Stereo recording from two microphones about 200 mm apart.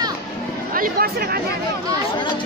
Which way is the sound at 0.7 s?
45° right (ahead or behind).